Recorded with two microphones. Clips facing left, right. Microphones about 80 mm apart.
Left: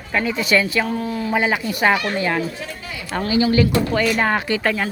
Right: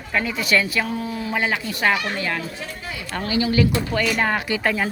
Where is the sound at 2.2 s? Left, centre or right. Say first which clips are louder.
Left 5 dB; left.